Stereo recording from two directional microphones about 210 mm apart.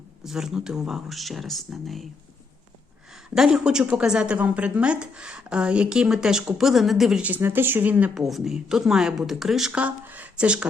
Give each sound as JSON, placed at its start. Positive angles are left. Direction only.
{"t": 0.3, "sound": "a woman's voice", "side_deg": 0}
{"t": 3.2, "sound": "a woman's voice", "side_deg": -5}